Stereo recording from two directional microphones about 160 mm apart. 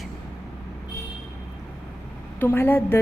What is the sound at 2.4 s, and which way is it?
Speech, 15° left (ahead or behind).